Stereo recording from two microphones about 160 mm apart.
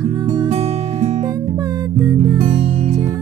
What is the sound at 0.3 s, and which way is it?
Music, 30° right (ahead or behind).